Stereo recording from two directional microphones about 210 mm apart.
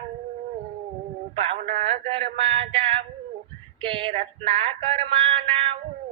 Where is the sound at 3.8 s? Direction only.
25° right (ahead or behind).